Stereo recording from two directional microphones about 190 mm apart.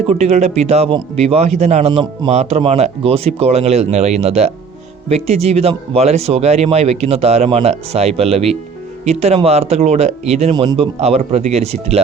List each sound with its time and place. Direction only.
0.1 s speech: 35° right (ahead or behind)